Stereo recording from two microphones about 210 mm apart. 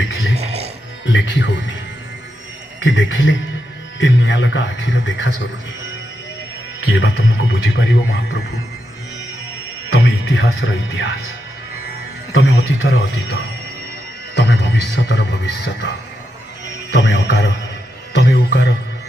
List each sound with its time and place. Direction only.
0.3 s music: 30° right (ahead or behind)
1.0 s speech: 60° left (ahead or behind)
2.8 s speech: 60° left (ahead or behind)
6.8 s speech: 60° left (ahead or behind)
9.9 s speech: 70° left (ahead or behind)
12.3 s a man's voice: 65° left (ahead or behind)
14.3 s speech: 55° left (ahead or behind)
16.9 s speech: 55° left (ahead or behind)
18.1 s music: 55° left (ahead or behind)